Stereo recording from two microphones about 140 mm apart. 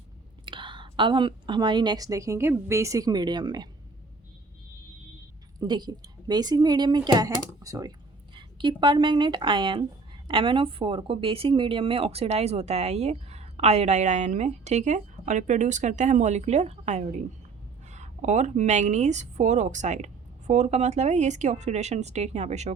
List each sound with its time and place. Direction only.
0.4 s a woman's voice: 35° right (ahead or behind)
5.5 s a woman's voice: 30° right (ahead or behind); by 22.7 s 55° right (ahead or behind)